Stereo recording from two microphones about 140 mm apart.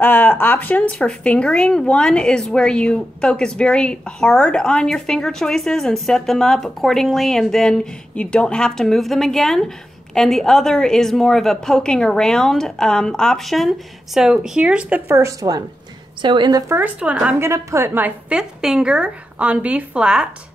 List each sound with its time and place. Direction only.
0.0 s speech: 15° left (ahead or behind); by 15.1 s 10° right (ahead or behind)
15.1 s a woman's voice: 25° right (ahead or behind)
16.7 s a woman's voice: 10° right (ahead or behind)